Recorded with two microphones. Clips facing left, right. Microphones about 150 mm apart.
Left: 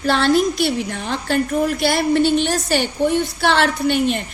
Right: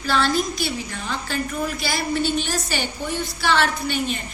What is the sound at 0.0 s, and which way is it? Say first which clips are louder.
A woman's voice: left 6 dB; 60° left (ahead or behind).